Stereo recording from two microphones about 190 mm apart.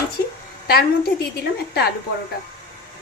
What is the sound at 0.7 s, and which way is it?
Speech, 55° left (ahead or behind).